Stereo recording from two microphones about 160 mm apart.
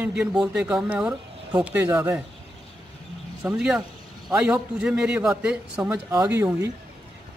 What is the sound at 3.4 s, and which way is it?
Speech, 5° right (ahead or behind).